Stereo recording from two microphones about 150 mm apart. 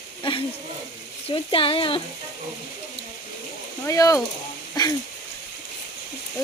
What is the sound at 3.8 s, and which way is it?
Speech, 20° left (ahead or behind).